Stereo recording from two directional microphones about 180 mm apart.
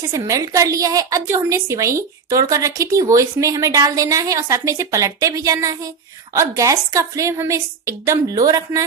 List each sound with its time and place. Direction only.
0.1 s a woman's voice: 20° right (ahead or behind)